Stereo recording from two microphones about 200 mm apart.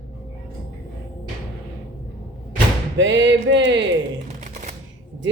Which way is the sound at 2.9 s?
65° right (ahead or behind).